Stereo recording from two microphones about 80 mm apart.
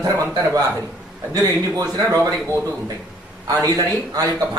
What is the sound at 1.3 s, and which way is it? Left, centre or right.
Speech, right.